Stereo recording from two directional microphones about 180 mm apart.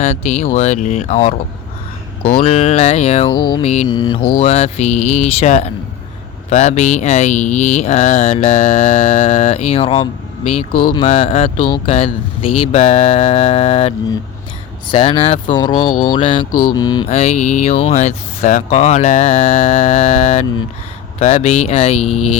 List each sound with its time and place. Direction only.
0.0 s speech: 40° left (ahead or behind)
2.4 s speech: 35° left (ahead or behind)
3.8 s speech: 25° left (ahead or behind)
8.5 s speech: 45° left (ahead or behind)
10.7 s mantra: 55° left (ahead or behind)
11.1 s speech: 35° left (ahead or behind)
12.8 s speech: 40° left (ahead or behind); by 17.1 s 20° left (ahead or behind)
17.1 s speech: 35° left (ahead or behind)